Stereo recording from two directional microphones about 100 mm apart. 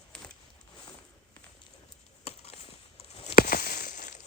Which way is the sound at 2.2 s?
90° left.